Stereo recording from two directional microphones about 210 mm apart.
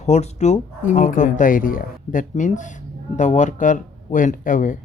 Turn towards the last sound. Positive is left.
turn(degrees=40)  # may be behind; listen again after turning